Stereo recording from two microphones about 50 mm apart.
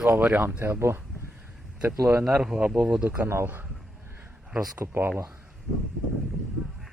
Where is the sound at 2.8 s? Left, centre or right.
Right.